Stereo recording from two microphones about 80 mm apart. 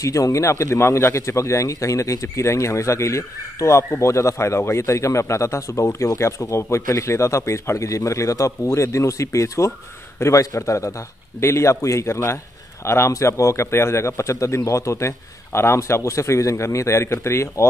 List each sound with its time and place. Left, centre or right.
0.0 s a man's voice: left